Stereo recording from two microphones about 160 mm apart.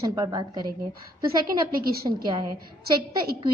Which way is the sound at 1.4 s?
65° right (ahead or behind).